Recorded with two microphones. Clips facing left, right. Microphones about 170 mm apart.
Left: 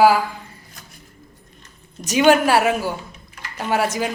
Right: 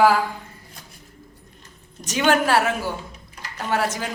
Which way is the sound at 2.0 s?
10° left (ahead or behind).